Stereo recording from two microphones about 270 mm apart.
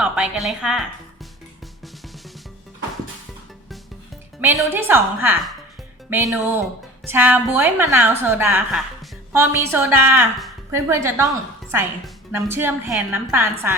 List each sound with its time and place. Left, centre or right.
0.0 s a woman's voice: centre
4.4 s a woman's voice: centre